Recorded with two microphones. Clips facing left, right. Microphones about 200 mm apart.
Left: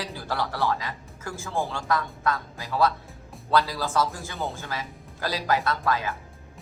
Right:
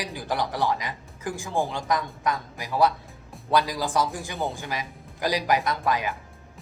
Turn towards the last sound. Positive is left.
turn(degrees=-15)  # may be behind; listen again after turning